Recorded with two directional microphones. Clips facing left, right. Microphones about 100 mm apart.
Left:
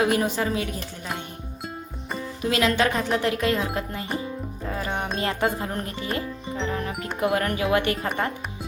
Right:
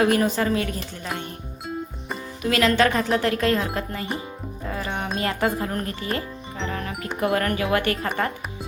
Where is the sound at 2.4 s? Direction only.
20° left (ahead or behind).